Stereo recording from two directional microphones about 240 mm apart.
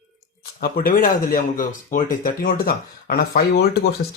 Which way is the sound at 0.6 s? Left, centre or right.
Left.